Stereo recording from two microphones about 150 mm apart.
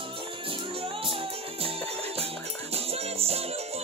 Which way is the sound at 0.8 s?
40° right (ahead or behind).